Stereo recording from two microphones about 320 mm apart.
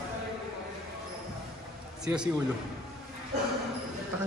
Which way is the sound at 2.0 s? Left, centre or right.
Centre.